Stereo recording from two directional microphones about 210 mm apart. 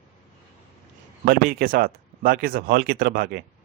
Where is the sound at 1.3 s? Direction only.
40° right (ahead or behind).